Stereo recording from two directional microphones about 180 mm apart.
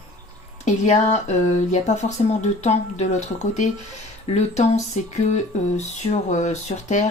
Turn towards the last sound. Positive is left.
turn(degrees=40)  # may be behind; listen again after turning